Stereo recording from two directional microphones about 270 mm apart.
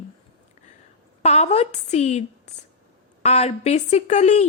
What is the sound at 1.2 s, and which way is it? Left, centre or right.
Speech, left.